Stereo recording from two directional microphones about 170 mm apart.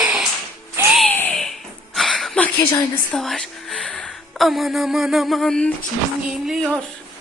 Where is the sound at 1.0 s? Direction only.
10° left (ahead or behind).